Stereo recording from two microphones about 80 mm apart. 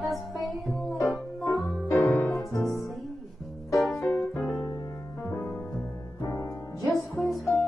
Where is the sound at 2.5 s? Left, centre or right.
Left.